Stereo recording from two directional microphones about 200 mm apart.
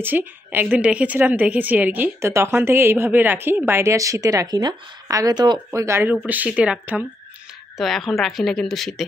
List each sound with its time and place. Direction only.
0.0 s a woman's voice: 10° right (ahead or behind)